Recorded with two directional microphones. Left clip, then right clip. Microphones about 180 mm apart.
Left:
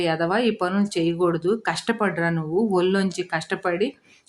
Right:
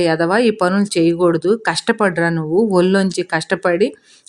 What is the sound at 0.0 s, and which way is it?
A woman's voice, 35° right (ahead or behind).